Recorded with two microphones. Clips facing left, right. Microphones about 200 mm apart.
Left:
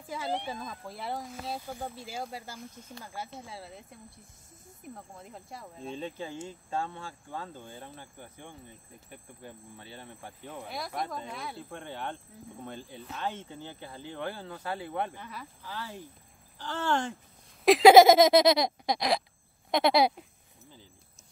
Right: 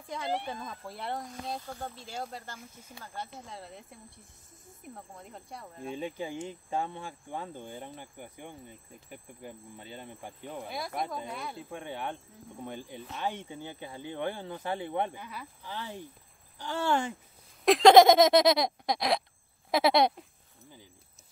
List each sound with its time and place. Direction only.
0.0 s a sound: 5° left (ahead or behind)
0.3 s speech: 5° right (ahead or behind)
5.9 s speech: 15° right (ahead or behind)
10.7 s speech: centre (ahead or behind)
11.8 s speech: 15° right (ahead or behind)
15.1 s speech: centre (ahead or behind)
15.6 s speech: 20° right (ahead or behind)
17.6 s speech: 5° left (ahead or behind)